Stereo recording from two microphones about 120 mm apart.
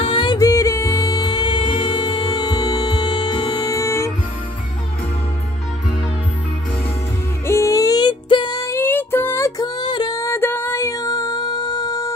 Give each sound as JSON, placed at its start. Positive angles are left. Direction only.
{"t": 0.0, "sound": "music", "side_deg": 45}
{"t": 3.7, "sound": "music", "side_deg": 25}
{"t": 7.4, "sound": "music", "side_deg": 25}
{"t": 9.6, "sound": "music", "side_deg": 35}